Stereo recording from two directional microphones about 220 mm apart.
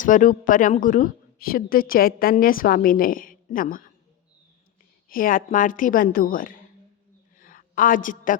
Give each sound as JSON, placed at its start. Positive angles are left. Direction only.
{"t": 0.0, "sound": "a woman's voice", "side_deg": 35}
{"t": 5.0, "sound": "a woman's voice", "side_deg": 40}
{"t": 7.3, "sound": "a sound", "side_deg": 40}